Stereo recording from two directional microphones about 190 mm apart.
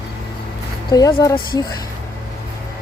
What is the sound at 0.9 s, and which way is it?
Speech, 20° left (ahead or behind).